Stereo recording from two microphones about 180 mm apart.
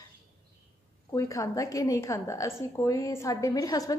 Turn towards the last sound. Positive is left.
turn(degrees=20)  # may be behind; listen again after turning